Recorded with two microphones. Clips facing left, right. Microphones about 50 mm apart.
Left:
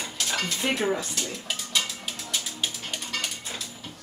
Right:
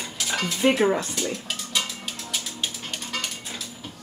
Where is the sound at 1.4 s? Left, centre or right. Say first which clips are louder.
Even; centre.